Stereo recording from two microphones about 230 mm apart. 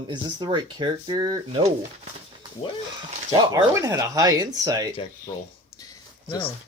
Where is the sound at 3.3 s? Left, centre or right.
Centre.